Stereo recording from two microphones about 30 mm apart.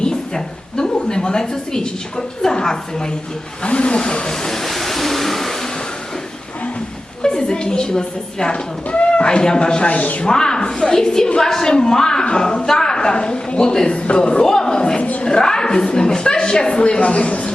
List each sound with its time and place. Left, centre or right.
0.0 s a woman's voice: left
3.6 s speech: left
4.3 s a woman's voice: centre
4.6 s a sound: centre
7.2 s a woman's voice: left
8.9 s a sound: left
9.2 s a woman's voice: left
10.2 s a woman's voice: left
14.4 s a woman's voice: left